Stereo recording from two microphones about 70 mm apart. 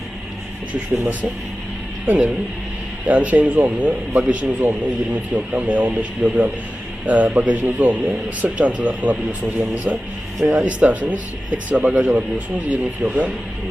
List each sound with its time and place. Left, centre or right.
2.0 s a man's voice: right